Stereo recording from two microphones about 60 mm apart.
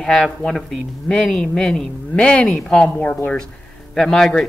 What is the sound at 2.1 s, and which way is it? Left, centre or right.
Speech, centre.